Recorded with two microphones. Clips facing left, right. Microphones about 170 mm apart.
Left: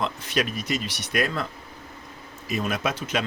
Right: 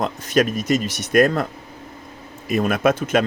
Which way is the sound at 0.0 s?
45° right (ahead or behind).